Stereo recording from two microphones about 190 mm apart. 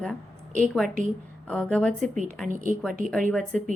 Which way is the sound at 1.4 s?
5° left (ahead or behind).